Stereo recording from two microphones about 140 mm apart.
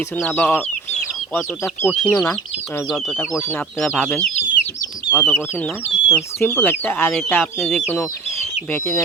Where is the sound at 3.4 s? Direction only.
20° left (ahead or behind).